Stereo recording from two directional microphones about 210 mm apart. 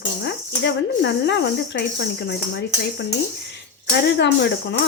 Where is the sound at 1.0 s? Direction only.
55° left (ahead or behind).